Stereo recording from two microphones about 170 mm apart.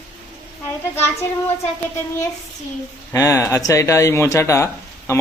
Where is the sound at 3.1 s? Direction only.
20° left (ahead or behind).